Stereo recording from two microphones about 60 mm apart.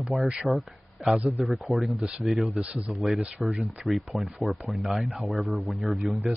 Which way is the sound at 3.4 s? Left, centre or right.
Centre.